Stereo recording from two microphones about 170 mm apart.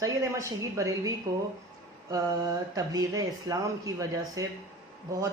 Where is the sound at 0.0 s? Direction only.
20° right (ahead or behind).